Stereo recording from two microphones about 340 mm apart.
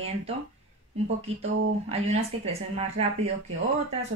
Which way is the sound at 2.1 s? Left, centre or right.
Centre.